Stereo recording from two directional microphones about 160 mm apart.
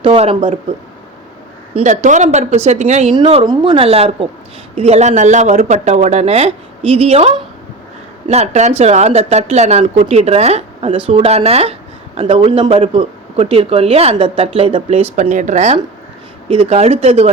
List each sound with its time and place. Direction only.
0.0 s speech: 35° right (ahead or behind)
1.7 s speech: 50° right (ahead or behind)
3.4 s speech: 25° right (ahead or behind)
15.1 s speech: 50° right (ahead or behind)